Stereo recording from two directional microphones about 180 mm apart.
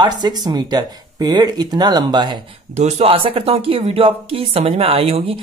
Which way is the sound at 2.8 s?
35° right (ahead or behind).